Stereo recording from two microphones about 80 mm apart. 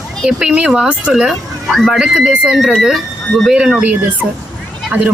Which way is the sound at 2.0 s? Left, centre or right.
Centre.